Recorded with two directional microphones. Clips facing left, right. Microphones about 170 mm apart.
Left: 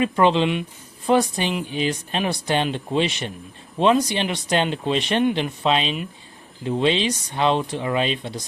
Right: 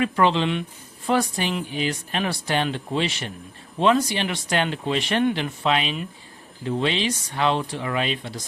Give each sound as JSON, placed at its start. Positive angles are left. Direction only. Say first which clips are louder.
{"t": 0.0, "sound": "speech", "louder": "left 2 dB", "side_deg": 20}